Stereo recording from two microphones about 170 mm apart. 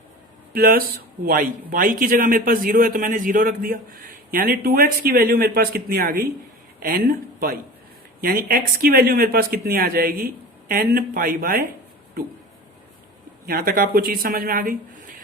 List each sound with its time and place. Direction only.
0.5 s speech: 60° right (ahead or behind)
13.4 s speech: 60° right (ahead or behind)